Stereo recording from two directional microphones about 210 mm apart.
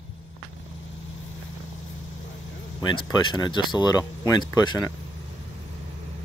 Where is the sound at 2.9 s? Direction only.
20° left (ahead or behind).